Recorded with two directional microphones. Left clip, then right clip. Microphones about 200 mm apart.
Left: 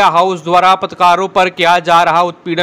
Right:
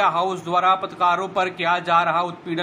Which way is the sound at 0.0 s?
35° left (ahead or behind).